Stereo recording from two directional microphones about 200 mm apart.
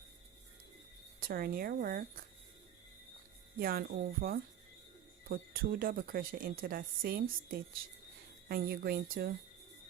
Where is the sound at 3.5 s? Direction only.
45° right (ahead or behind).